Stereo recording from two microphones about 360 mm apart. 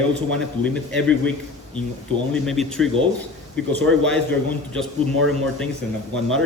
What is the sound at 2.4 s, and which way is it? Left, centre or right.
A man's voice, centre.